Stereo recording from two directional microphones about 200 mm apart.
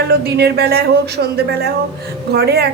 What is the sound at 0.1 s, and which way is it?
A woman's voice, 55° right (ahead or behind).